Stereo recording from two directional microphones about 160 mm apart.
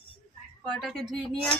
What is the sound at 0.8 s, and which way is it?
Speech, centre (ahead or behind).